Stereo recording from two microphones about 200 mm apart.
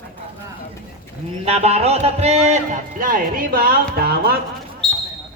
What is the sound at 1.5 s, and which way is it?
Speech, 30° right (ahead or behind).